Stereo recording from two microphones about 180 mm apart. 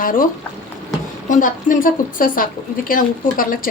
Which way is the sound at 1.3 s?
50° left (ahead or behind).